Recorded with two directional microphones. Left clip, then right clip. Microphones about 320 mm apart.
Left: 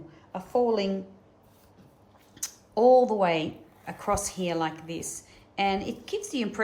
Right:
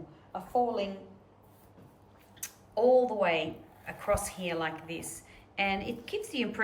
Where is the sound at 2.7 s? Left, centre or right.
Centre.